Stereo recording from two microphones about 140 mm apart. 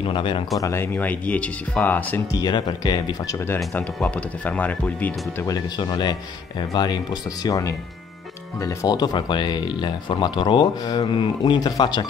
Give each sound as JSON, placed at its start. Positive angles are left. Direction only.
{"t": 0.0, "sound": "speech", "side_deg": 35}
{"t": 0.6, "sound": "speech", "side_deg": 20}
{"t": 2.3, "sound": "speech", "side_deg": 30}
{"t": 5.8, "sound": "speech", "side_deg": 30}